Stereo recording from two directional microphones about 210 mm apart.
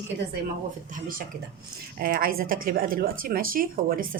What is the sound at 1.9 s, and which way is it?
Speech, 45° right (ahead or behind).